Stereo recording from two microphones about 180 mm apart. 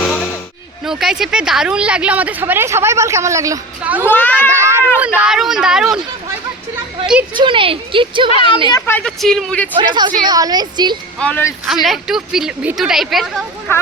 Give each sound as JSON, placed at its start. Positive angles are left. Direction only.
{"t": 0.0, "sound": "music", "side_deg": 5}
{"t": 0.9, "sound": "speech", "side_deg": 0}
{"t": 4.0, "sound": "a child's voice", "side_deg": 10}
{"t": 4.4, "sound": "a sound", "side_deg": -15}
{"t": 4.9, "sound": "speech", "side_deg": -5}
{"t": 7.3, "sound": "a woman's voice", "side_deg": -30}
{"t": 8.7, "sound": "speech", "side_deg": 10}
{"t": 9.7, "sound": "a woman's voice", "side_deg": -25}
{"t": 11.2, "sound": "a child's voice", "side_deg": 10}
{"t": 11.6, "sound": "speech", "side_deg": 0}
{"t": 13.7, "sound": "a child's voice", "side_deg": 15}